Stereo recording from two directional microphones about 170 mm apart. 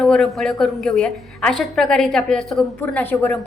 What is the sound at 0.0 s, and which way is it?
A woman's voice, centre (ahead or behind).